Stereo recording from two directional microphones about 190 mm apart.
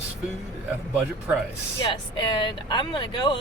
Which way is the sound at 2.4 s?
25° left (ahead or behind).